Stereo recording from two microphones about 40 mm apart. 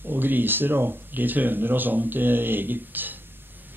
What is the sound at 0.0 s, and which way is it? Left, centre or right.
Speech, right.